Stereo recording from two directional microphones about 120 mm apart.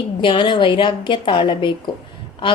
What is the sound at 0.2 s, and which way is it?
Speech, 40° left (ahead or behind).